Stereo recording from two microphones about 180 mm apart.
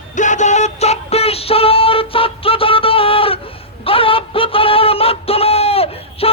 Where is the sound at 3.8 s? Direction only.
30° left (ahead or behind).